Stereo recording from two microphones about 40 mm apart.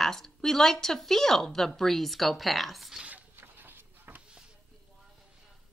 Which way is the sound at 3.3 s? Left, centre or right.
Right.